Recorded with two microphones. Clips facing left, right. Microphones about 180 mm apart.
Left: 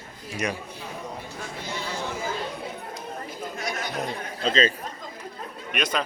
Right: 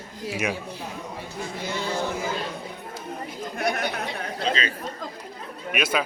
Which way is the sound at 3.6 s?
60° right (ahead or behind).